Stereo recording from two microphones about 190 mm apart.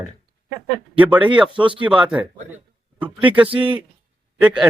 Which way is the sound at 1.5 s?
25° right (ahead or behind).